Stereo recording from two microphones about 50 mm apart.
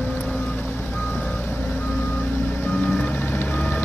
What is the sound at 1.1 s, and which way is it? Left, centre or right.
Reversing beeps, left.